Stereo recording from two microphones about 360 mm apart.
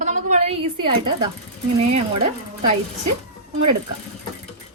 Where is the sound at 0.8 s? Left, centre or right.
Right.